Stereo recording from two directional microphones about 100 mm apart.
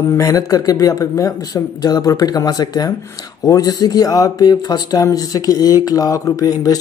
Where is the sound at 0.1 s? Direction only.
35° left (ahead or behind).